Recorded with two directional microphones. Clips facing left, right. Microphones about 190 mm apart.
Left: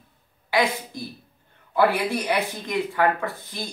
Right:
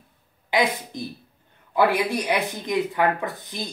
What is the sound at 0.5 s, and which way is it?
A woman's voice, 20° right (ahead or behind).